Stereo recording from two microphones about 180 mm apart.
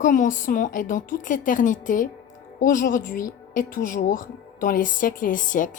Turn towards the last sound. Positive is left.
turn(degrees=45)  # may be behind; listen again after turning